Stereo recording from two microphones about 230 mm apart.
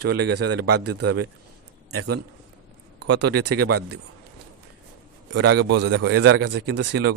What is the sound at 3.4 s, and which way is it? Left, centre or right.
Speech, right.